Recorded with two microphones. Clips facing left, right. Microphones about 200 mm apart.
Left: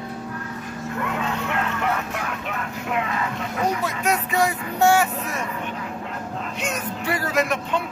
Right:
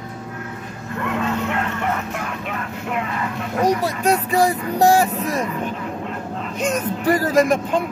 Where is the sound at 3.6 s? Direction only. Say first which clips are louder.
Right 5 dB; 35° right (ahead or behind).